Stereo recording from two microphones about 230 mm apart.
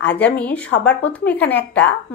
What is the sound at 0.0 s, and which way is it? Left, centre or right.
Speech, centre.